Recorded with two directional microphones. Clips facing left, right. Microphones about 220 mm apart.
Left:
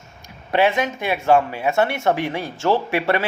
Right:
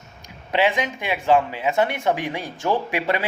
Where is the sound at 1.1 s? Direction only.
15° right (ahead or behind).